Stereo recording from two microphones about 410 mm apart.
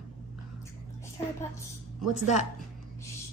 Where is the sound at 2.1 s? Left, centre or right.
Right.